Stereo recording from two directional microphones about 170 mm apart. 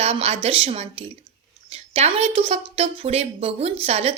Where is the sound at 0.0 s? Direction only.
35° right (ahead or behind).